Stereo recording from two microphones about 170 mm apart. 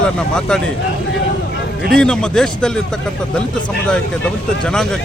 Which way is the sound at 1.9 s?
5° left (ahead or behind).